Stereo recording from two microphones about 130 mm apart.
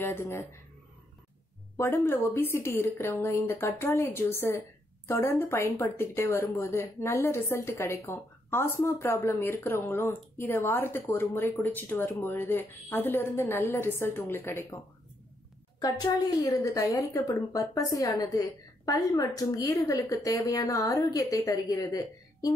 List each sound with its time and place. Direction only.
0.0 s speech: 20° left (ahead or behind)
1.8 s speech: 20° left (ahead or behind)
15.8 s speech: 30° left (ahead or behind)